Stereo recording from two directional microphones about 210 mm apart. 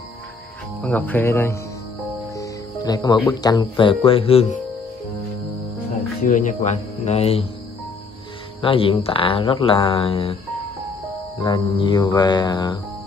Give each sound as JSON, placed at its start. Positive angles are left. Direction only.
{"t": 0.7, "sound": "speech", "side_deg": 10}
{"t": 6.2, "sound": "speech", "side_deg": 35}
{"t": 8.5, "sound": "speech", "side_deg": 25}
{"t": 11.4, "sound": "speech", "side_deg": 25}